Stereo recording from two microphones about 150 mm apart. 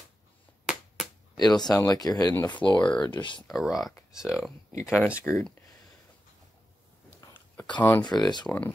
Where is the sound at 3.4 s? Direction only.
Centre (ahead or behind).